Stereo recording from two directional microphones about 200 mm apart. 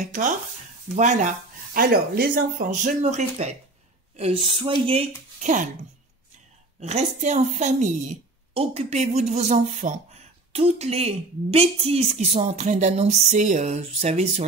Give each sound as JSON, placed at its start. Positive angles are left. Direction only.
{"t": 0.0, "sound": "a woman's voice", "side_deg": -40}
{"t": 5.4, "sound": "a woman's voice", "side_deg": -40}
{"t": 6.8, "sound": "a woman's voice", "side_deg": -35}